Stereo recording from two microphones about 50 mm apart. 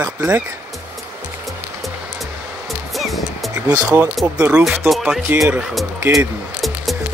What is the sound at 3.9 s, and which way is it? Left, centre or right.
Speech, right.